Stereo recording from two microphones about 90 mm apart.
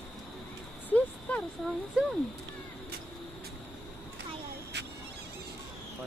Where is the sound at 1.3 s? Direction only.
15° left (ahead or behind).